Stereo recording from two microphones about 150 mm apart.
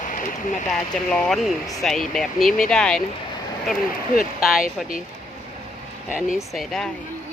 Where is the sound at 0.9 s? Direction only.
5° left (ahead or behind).